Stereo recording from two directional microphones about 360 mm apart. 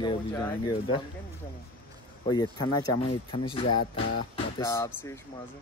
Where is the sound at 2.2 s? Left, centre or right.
Centre.